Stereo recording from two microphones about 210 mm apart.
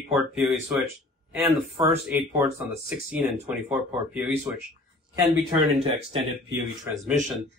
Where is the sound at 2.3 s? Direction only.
10° right (ahead or behind).